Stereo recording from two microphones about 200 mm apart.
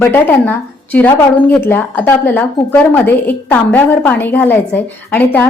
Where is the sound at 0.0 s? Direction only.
10° left (ahead or behind).